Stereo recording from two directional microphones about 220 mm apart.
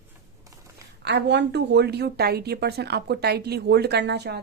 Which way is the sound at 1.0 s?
50° right (ahead or behind).